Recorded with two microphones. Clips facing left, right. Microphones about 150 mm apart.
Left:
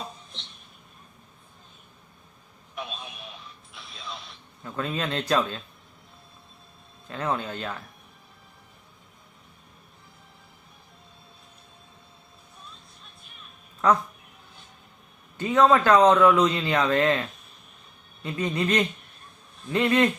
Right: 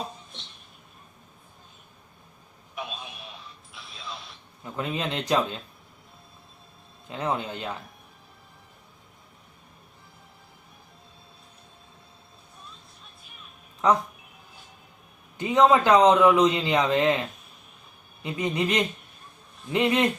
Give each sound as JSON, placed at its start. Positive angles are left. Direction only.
{"t": 2.7, "sound": "a sound", "side_deg": 0}
{"t": 3.7, "sound": "music", "side_deg": 0}
{"t": 4.6, "sound": "a man's voice", "side_deg": -15}
{"t": 7.1, "sound": "a man's voice", "side_deg": -15}
{"t": 13.8, "sound": "speech", "side_deg": -15}
{"t": 15.4, "sound": "a man's voice", "side_deg": -15}